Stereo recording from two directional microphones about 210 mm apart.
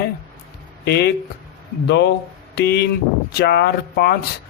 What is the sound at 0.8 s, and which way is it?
A man's voice, 50° left (ahead or behind).